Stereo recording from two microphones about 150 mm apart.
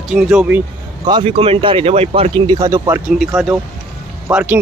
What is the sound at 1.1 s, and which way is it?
Speech, 35° right (ahead or behind).